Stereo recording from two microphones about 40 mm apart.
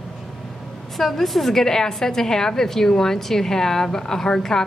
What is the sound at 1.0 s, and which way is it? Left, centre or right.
A woman's voice, centre.